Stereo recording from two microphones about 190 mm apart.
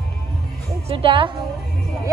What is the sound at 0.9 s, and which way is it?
Music, 30° right (ahead or behind).